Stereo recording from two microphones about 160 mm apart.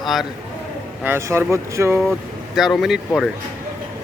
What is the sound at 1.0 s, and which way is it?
Speech, 15° right (ahead or behind).